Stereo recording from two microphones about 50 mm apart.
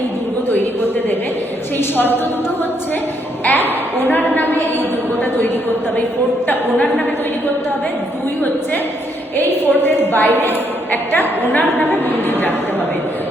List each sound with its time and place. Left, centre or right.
1.8 s a woman's voice: left
3.5 s a woman's voice: left
6.7 s a woman's voice: left
9.5 s a woman's voice: left